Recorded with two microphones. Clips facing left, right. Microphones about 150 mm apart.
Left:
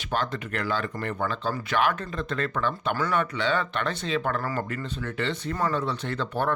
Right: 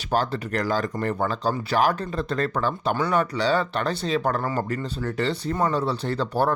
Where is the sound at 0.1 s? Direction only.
40° right (ahead or behind).